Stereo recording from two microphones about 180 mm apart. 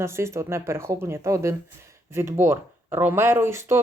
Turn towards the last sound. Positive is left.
turn(degrees=-15)  # may be behind; listen again after turning